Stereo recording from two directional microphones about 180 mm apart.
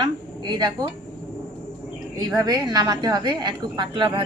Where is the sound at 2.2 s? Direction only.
20° right (ahead or behind).